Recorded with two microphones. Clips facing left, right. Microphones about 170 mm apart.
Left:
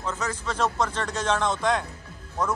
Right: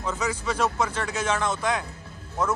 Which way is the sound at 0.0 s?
10° right (ahead or behind).